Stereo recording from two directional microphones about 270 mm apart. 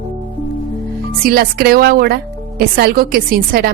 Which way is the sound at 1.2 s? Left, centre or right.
Right.